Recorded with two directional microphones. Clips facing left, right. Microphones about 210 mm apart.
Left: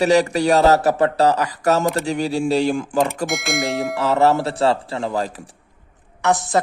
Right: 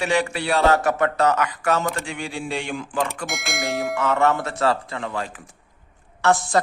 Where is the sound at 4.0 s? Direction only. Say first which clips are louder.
Left 5 dB; 35° left (ahead or behind).